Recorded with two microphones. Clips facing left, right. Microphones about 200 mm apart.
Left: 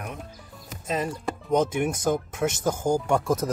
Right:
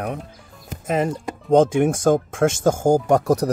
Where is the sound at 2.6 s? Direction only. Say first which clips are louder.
Right 7 dB; 50° right (ahead or behind).